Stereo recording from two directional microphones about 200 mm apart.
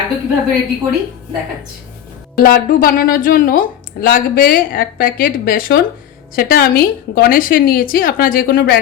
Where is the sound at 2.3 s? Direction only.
45° left (ahead or behind).